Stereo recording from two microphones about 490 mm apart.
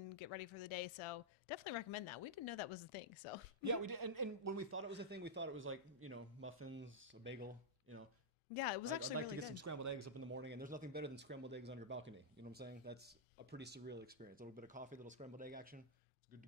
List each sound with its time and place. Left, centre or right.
0.1 s speech: left
3.6 s a man's voice: right; by 8.0 s centre
9.4 s speech: right
10.3 s a man's voice: right